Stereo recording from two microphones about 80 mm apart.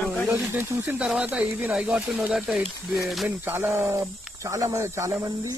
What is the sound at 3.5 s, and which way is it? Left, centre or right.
Speech, right.